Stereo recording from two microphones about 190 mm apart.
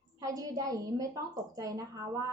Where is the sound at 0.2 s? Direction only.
20° right (ahead or behind).